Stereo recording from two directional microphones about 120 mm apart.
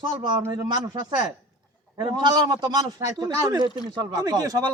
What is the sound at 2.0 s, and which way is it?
A man's voice, 45° right (ahead or behind).